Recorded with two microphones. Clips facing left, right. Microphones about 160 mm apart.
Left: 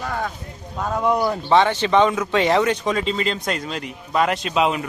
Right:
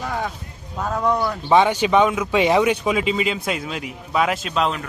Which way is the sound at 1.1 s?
20° left (ahead or behind).